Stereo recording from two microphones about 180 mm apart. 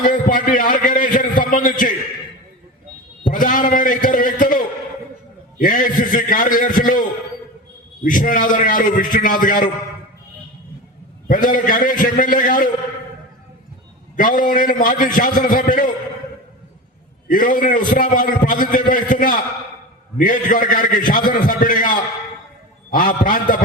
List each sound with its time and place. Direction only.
0.0 s a man's voice: 50° left (ahead or behind)
3.2 s a man's voice: 50° left (ahead or behind)
11.3 s a man's voice: 50° left (ahead or behind)
14.2 s a man's voice: 50° left (ahead or behind)
17.2 s a man's voice: 50° left (ahead or behind)